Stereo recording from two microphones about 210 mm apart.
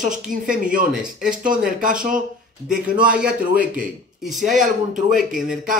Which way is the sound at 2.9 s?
5° right (ahead or behind).